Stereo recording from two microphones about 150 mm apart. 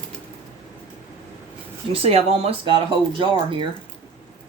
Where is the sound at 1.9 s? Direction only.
40° right (ahead or behind).